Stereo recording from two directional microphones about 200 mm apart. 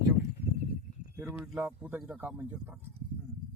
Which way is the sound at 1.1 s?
10° right (ahead or behind).